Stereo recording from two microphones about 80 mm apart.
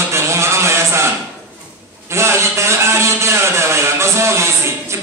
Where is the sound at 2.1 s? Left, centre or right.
Right.